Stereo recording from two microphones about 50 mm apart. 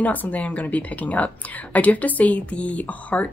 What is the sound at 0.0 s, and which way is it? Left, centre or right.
Speech, left.